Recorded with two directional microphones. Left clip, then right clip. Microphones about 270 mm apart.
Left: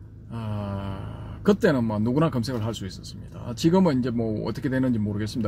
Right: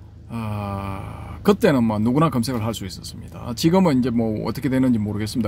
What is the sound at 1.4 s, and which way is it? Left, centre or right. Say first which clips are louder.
Speech: right 4 dB; right.